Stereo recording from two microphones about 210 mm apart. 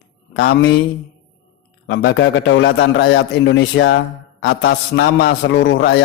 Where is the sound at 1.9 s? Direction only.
55° left (ahead or behind).